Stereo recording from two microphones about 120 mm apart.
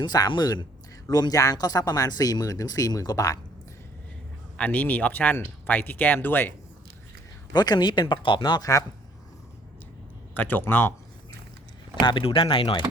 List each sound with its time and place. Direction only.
0.0 s speech: 35° left (ahead or behind)
4.5 s speech: 10° left (ahead or behind)
7.5 s speech: 35° left (ahead or behind)
10.3 s speech: 15° left (ahead or behind)
11.9 s speech: 40° left (ahead or behind)